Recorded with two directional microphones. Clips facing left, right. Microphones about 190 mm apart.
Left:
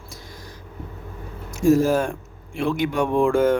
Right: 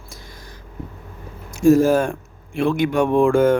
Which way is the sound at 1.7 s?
50° right (ahead or behind).